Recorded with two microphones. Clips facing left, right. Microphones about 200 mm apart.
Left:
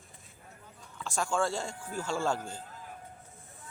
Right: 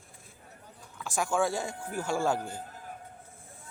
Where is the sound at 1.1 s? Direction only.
15° right (ahead or behind).